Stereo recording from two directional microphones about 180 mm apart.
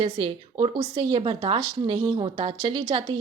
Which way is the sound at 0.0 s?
25° right (ahead or behind).